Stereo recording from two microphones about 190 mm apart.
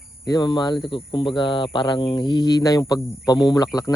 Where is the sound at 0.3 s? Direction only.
20° left (ahead or behind).